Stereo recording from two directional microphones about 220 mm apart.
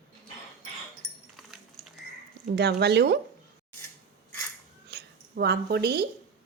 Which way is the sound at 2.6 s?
50° right (ahead or behind).